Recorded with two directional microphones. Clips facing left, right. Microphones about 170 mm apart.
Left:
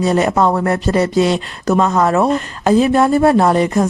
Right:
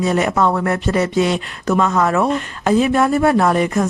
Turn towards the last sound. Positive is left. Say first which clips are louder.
# left 3 dB
turn(degrees=30)  # may be behind; listen again after turning